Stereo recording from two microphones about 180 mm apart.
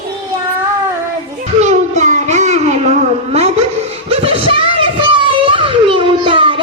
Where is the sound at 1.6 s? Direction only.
40° right (ahead or behind).